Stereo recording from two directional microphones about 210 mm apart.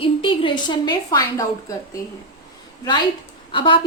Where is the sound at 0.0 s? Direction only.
25° left (ahead or behind).